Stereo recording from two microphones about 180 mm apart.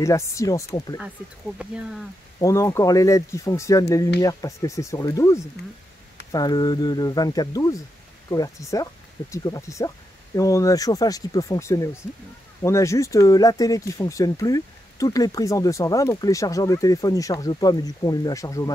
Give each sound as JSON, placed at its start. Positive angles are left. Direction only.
{"t": 0.0, "sound": "speech", "side_deg": 15}
{"t": 1.6, "sound": "speech", "side_deg": -5}
{"t": 2.4, "sound": "speech", "side_deg": 15}